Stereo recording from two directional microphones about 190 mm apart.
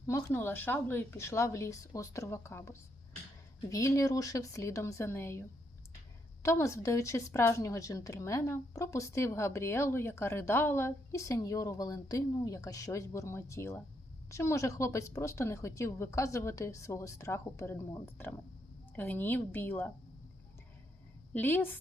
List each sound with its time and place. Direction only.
0.1 s a woman's voice: 15° left (ahead or behind)
6.4 s a woman's voice: 15° left (ahead or behind)
21.3 s a woman's voice: 10° left (ahead or behind)